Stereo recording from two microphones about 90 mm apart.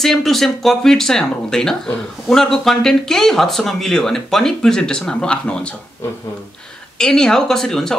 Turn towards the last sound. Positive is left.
turn(degrees=5)  # may be behind; listen again after turning